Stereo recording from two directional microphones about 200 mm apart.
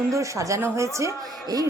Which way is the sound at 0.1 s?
15° right (ahead or behind).